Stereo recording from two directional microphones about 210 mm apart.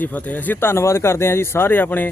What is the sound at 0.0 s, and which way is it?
Speech, 5° left (ahead or behind).